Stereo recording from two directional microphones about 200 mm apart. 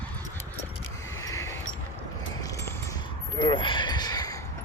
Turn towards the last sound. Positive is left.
turn(degrees=20)  # may be behind; listen again after turning